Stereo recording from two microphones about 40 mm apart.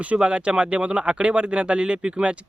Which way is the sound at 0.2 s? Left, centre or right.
Right.